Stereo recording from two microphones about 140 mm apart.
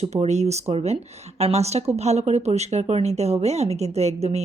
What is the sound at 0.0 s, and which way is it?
Speech, 50° right (ahead or behind).